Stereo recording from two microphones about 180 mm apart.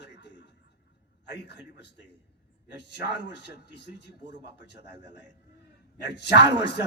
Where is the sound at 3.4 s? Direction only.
70° left (ahead or behind).